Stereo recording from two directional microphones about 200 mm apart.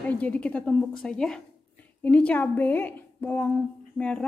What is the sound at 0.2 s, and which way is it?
A woman's voice, 5° left (ahead or behind).